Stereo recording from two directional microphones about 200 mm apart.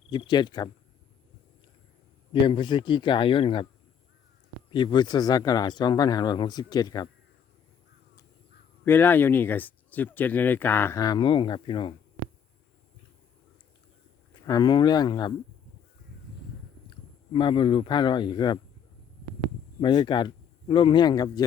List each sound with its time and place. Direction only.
0.1 s speech: 25° left (ahead or behind)
2.3 s speech: 25° left (ahead or behind)
4.7 s speech: 25° left (ahead or behind)
8.8 s speech: 10° left (ahead or behind)
14.4 s speech: 20° left (ahead or behind)
17.3 s speech: 25° left (ahead or behind)
19.8 s speech: 20° left (ahead or behind)